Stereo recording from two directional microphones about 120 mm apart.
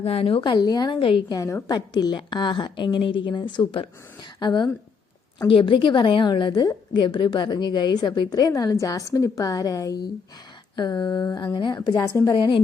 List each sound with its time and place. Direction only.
0.0 s a woman's voice: 55° left (ahead or behind); by 0.9 s 35° left (ahead or behind)
0.9 s a woman's voice: 45° left (ahead or behind)
1.4 s a woman's voice: 30° left (ahead or behind)